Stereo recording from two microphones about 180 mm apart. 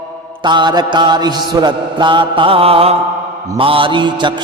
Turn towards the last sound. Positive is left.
turn(degrees=-25)  # may be behind; listen again after turning